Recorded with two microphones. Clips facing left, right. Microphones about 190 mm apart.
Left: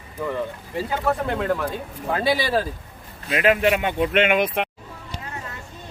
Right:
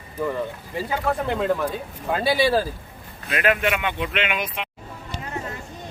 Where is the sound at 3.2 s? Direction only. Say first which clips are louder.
Left 3 dB; 25° left (ahead or behind); by 4.7 s 55° left (ahead or behind).